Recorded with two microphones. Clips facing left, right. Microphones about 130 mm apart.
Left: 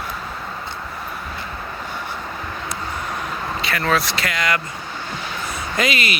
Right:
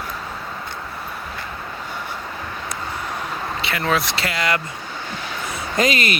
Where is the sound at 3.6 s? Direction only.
20° right (ahead or behind).